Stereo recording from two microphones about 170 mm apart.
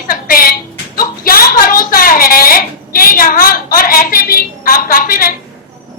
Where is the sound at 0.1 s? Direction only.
60° left (ahead or behind).